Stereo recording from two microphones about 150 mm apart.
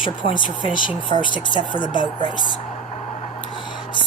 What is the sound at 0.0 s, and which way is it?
Speech, 35° left (ahead or behind).